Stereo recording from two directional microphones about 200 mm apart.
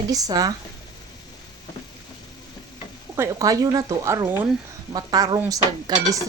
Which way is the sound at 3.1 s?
15° right (ahead or behind).